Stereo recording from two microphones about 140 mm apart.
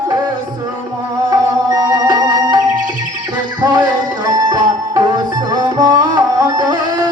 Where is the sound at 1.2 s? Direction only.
25° right (ahead or behind).